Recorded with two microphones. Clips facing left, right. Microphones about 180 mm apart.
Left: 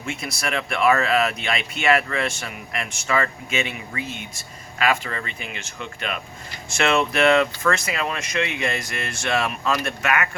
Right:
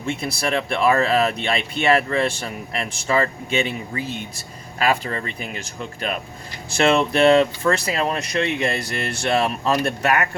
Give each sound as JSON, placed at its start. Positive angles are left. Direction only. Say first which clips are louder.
{"t": 0.0, "sound": "speech", "louder": "right 4 dB", "side_deg": -30}